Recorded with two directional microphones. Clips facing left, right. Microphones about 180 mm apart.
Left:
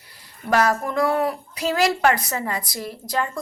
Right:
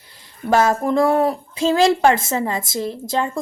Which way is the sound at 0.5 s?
25° right (ahead or behind).